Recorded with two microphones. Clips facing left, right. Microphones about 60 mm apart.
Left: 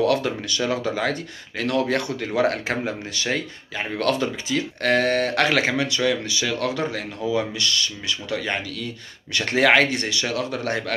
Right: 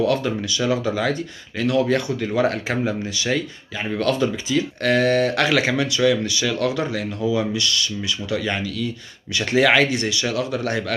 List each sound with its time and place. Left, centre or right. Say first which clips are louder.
0.0 s speech: right 1 dB; left
0.6 s speech: right 2 dB; left